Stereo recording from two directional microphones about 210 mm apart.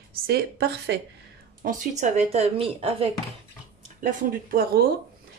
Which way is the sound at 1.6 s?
35° right (ahead or behind).